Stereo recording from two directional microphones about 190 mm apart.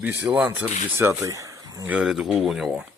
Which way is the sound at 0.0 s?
10° right (ahead or behind).